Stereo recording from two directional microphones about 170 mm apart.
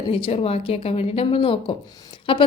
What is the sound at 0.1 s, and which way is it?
Speech, 35° left (ahead or behind).